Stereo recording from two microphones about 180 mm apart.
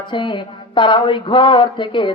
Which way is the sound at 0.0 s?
25° left (ahead or behind).